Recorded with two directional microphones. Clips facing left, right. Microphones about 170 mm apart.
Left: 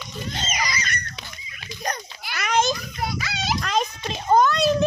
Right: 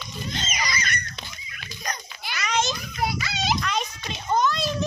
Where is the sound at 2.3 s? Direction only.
55° left (ahead or behind).